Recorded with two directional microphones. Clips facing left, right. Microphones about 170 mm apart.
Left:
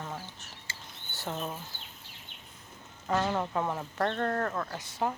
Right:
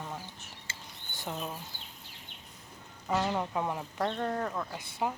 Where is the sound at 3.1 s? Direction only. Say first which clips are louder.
Left 1 dB; 10° right (ahead or behind).